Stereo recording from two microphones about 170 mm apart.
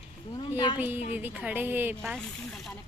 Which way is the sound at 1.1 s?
10° right (ahead or behind).